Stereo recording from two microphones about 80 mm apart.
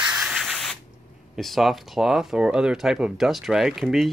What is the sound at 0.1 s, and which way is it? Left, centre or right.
Spray, centre.